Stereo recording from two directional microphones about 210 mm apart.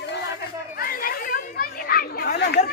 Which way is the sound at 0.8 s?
45° left (ahead or behind).